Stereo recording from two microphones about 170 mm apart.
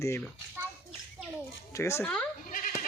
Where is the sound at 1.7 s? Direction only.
15° left (ahead or behind).